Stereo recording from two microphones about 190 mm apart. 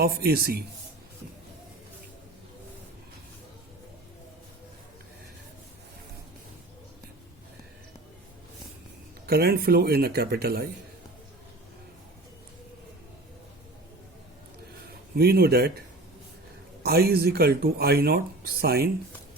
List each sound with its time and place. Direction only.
0.0 s speech: 55° right (ahead or behind)
9.2 s speech: 55° right (ahead or behind)
15.1 s speech: 55° right (ahead or behind)
16.8 s speech: 55° right (ahead or behind)